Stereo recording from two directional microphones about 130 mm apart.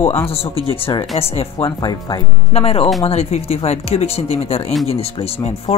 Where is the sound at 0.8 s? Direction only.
40° left (ahead or behind).